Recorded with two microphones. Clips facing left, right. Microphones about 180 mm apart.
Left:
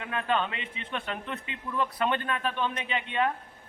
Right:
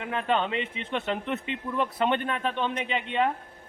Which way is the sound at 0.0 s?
25° right (ahead or behind).